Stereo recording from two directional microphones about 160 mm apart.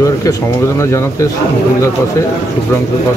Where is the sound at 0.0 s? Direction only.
20° left (ahead or behind).